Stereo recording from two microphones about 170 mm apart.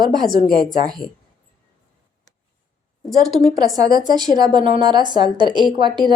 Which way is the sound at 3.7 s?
20° right (ahead or behind).